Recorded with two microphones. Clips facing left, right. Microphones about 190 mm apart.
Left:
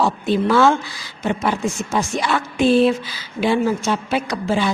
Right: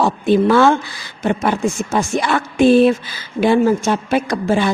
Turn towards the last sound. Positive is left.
turn(degrees=-50)  # may be behind; listen again after turning